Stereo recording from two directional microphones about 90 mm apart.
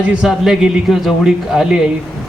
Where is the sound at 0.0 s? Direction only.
10° right (ahead or behind).